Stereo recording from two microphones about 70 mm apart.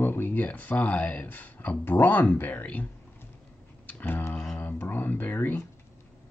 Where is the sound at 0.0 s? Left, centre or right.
Left.